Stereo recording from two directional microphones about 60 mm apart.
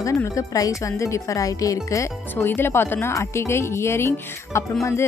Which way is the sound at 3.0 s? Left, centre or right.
Left.